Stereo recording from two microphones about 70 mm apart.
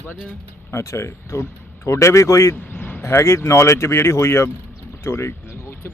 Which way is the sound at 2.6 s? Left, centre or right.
Left.